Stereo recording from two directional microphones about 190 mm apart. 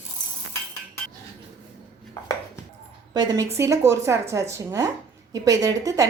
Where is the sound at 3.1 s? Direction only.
20° right (ahead or behind).